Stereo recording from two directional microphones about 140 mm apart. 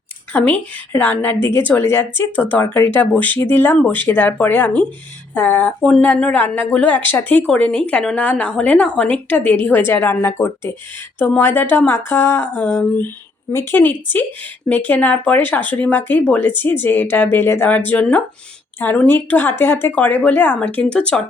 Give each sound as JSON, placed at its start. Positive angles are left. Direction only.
{"t": 0.3, "sound": "a woman's voice", "side_deg": 10}